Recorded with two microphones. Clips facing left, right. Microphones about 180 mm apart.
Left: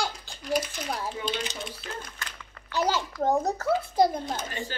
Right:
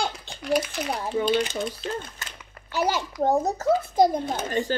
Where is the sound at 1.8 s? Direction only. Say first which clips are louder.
Right 7 dB; 25° right (ahead or behind).